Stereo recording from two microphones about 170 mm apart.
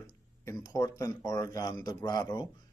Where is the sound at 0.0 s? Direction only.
20° left (ahead or behind).